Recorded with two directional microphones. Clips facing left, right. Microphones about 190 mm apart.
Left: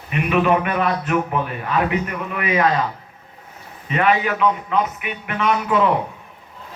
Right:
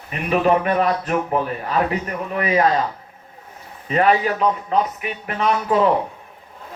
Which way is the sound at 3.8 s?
35° right (ahead or behind).